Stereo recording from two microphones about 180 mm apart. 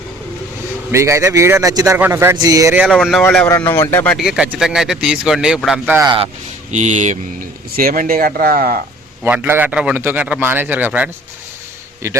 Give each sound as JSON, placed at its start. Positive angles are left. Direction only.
{"t": 0.9, "sound": "a man's voice", "side_deg": -15}
{"t": 2.8, "sound": "speech", "side_deg": 0}
{"t": 3.2, "sound": "speech", "side_deg": 15}
{"t": 4.2, "sound": "speech", "side_deg": -5}
{"t": 6.1, "sound": "speech", "side_deg": -25}
{"t": 6.7, "sound": "speech", "side_deg": -40}
{"t": 9.2, "sound": "a man's voice", "side_deg": -10}